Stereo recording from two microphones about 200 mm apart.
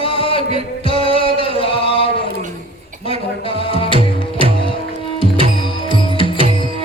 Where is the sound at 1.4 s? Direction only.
25° left (ahead or behind).